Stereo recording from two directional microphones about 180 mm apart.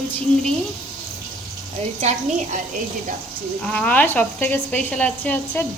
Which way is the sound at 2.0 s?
40° right (ahead or behind).